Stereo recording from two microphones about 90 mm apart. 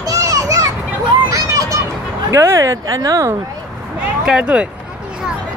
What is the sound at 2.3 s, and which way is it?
Speech, 35° right (ahead or behind).